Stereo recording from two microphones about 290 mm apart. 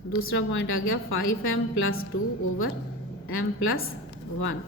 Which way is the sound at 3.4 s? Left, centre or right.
Left.